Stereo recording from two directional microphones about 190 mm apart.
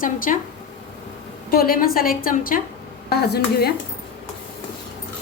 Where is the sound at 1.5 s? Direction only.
50° left (ahead or behind).